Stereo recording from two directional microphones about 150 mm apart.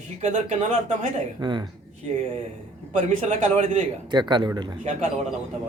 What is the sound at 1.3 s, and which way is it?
Speech, 30° right (ahead or behind).